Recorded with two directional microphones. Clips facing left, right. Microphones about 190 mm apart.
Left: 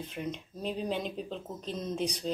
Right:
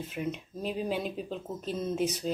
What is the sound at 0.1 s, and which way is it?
Speech, 5° right (ahead or behind).